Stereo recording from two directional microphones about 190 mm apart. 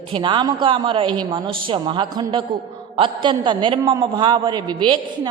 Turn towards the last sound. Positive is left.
turn(degrees=-25)  # may be behind; listen again after turning